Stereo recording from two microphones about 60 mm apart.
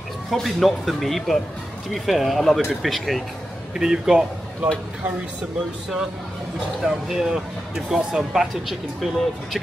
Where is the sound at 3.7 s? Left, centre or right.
Centre.